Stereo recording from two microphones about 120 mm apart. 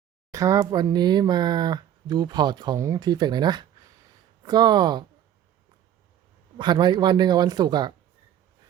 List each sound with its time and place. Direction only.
0.3 s speech: 25° right (ahead or behind)
6.6 s speech: 40° right (ahead or behind)